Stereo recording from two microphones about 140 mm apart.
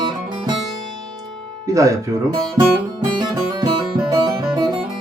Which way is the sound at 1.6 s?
25° right (ahead or behind).